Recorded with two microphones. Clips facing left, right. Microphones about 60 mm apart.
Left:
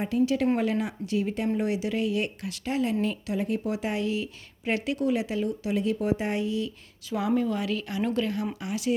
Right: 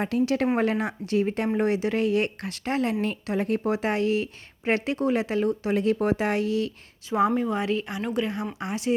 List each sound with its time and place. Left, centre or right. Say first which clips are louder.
0.1 s speech: left 1 dB; right
0.5 s speech: right 2 dB; right
6.1 s speech: right 4 dB; right
7.1 s speech: right 3 dB; right
8.5 s speech: right 2 dB; right